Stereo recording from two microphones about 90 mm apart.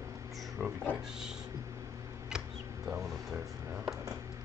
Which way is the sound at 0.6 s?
20° right (ahead or behind).